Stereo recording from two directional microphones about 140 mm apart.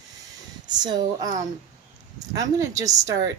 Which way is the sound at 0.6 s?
30° right (ahead or behind).